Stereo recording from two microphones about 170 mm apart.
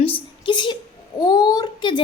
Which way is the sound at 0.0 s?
30° left (ahead or behind).